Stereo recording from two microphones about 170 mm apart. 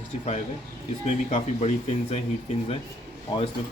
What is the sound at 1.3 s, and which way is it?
Speech, 35° left (ahead or behind).